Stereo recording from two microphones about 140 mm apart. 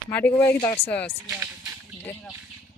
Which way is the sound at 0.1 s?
15° left (ahead or behind).